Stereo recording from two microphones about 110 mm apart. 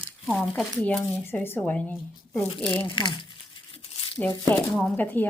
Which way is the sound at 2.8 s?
45° left (ahead or behind).